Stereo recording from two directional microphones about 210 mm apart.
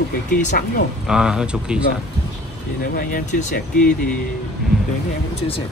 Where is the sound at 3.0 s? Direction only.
40° left (ahead or behind).